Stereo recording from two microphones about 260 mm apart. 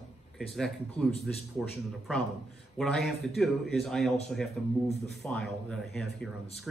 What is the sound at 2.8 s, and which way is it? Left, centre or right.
Speech, centre.